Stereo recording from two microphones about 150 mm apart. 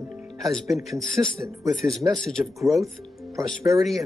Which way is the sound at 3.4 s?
20° right (ahead or behind).